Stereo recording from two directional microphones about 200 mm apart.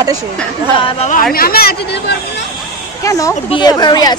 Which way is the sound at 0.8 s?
30° left (ahead or behind).